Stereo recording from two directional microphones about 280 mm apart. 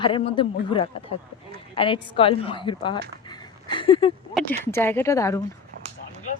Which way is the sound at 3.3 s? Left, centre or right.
Centre.